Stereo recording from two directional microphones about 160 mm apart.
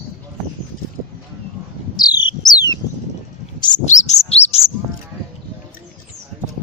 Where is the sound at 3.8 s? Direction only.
45° left (ahead or behind).